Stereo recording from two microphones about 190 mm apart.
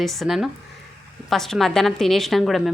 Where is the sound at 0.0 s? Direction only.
Centre (ahead or behind).